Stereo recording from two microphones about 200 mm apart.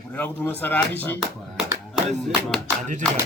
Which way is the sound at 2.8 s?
40° right (ahead or behind).